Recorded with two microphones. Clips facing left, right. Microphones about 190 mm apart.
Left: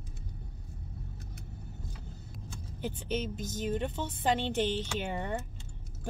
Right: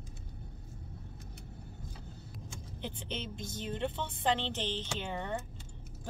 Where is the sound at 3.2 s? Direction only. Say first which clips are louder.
Left 5 dB; 40° left (ahead or behind).